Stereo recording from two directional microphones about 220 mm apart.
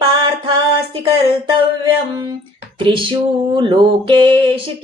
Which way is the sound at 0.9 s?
25° right (ahead or behind).